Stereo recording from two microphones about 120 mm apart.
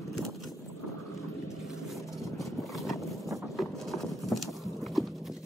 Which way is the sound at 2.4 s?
Centre (ahead or behind).